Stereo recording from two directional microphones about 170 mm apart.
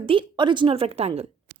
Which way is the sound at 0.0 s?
30° right (ahead or behind).